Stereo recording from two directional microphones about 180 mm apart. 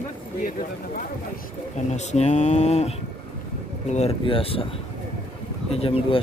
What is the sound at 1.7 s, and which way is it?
Speech, 40° left (ahead or behind).